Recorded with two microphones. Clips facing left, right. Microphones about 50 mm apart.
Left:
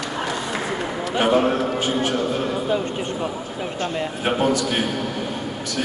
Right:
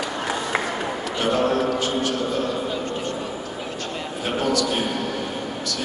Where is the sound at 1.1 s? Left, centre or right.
Left.